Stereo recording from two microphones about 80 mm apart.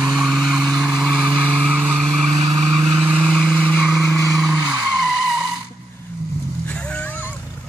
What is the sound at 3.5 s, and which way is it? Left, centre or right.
Vehicle, centre.